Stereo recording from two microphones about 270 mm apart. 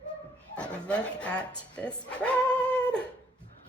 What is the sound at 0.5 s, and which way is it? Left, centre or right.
Speech, centre.